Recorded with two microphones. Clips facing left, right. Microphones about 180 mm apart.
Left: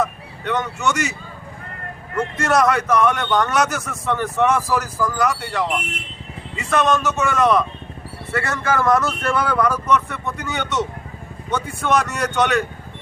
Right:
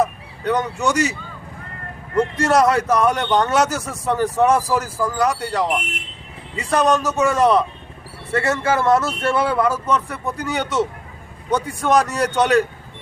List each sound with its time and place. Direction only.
0.0 s speech: 35° right (ahead or behind)
2.1 s a man's voice: 30° right (ahead or behind)